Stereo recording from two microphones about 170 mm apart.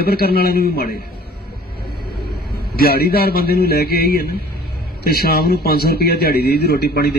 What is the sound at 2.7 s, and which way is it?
A man's voice, 65° left (ahead or behind).